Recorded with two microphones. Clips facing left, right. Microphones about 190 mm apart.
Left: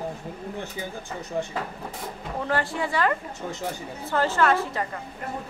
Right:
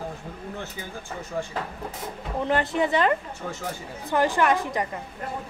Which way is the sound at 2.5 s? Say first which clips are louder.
Right 4 dB; 20° right (ahead or behind).